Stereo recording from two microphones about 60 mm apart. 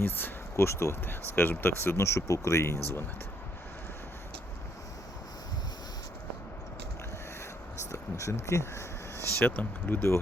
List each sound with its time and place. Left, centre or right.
0.0 s speech: left
1.0 s speech: left
8.1 s speech: left
9.4 s speech: left